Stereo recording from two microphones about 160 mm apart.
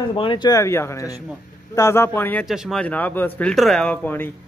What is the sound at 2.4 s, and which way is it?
Speech, 5° right (ahead or behind).